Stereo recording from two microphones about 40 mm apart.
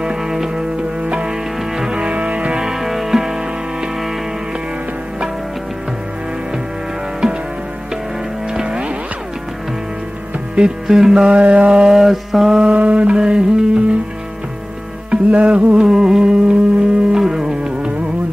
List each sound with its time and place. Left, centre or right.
0.0 s music: centre
1.0 s music: right
2.0 s music: right
2.6 s music: centre
8.5 s music: right
10.5 s music: centre
11.2 s music: right
11.8 s mantra: centre
12.4 s mantra: centre
12.7 s mantra: right
13.2 s music: centre
15.0 s music: right
15.8 s music: centre